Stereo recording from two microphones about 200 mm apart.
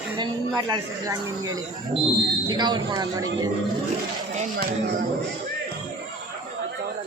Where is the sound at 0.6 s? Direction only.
20° right (ahead or behind).